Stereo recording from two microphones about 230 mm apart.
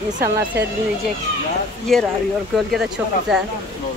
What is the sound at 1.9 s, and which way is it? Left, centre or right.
Speech, centre.